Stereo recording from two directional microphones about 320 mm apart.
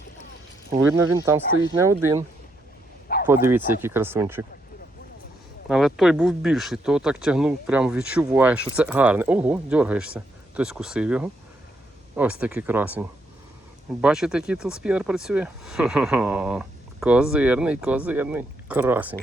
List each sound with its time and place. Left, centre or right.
0.8 s speech: centre
3.2 s speech: centre
5.6 s speech: centre